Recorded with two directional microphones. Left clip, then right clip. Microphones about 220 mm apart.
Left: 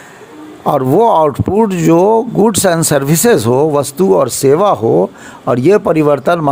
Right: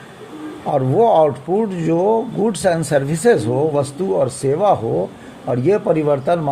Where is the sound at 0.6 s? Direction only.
40° left (ahead or behind).